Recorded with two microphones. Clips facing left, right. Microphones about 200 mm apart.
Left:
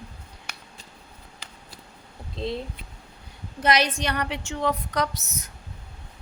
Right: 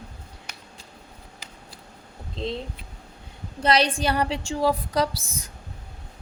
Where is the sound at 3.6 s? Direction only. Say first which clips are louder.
Right 2 dB; 30° right (ahead or behind).